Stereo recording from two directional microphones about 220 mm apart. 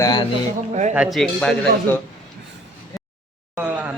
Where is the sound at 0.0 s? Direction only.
20° left (ahead or behind).